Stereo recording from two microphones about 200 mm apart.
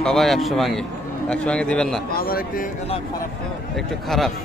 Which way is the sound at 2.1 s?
45° left (ahead or behind).